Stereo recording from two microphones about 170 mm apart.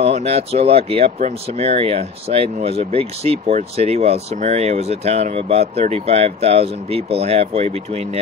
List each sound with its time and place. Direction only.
0.0 s speech: 35° right (ahead or behind)